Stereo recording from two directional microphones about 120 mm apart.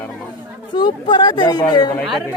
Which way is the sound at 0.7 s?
40° left (ahead or behind).